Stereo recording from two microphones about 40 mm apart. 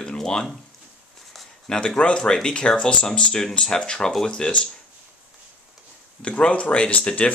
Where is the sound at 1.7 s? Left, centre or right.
Left.